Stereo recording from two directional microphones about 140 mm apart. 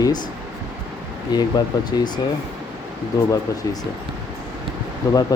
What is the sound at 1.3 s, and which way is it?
Speech, 30° left (ahead or behind).